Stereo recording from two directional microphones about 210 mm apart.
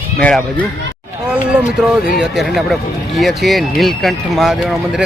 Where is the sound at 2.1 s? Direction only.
Centre (ahead or behind).